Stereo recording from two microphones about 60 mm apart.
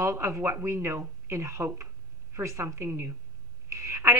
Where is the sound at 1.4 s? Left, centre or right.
Right.